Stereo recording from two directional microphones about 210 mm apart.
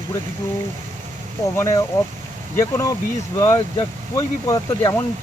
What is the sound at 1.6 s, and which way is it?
Speech, 15° left (ahead or behind).